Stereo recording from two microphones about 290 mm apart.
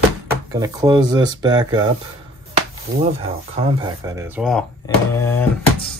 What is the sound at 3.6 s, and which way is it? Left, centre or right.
Speech, centre.